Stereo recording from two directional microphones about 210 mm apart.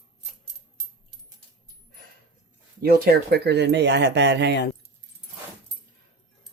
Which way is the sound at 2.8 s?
45° right (ahead or behind).